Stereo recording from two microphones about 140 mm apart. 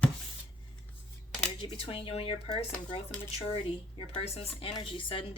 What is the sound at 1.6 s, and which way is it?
Speech, 35° left (ahead or behind).